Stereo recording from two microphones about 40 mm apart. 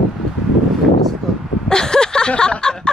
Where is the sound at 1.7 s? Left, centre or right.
Centre.